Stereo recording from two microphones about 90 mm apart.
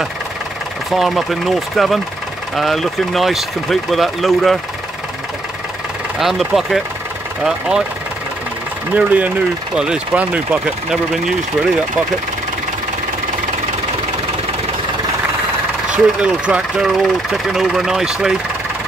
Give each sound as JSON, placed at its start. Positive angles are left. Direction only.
{"t": 0.9, "sound": "speech", "side_deg": 0}
{"t": 6.1, "sound": "speech", "side_deg": -5}
{"t": 8.9, "sound": "speech", "side_deg": -15}
{"t": 16.2, "sound": "speech", "side_deg": -10}